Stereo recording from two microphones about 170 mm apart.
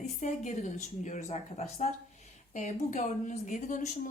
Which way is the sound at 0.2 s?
45° left (ahead or behind).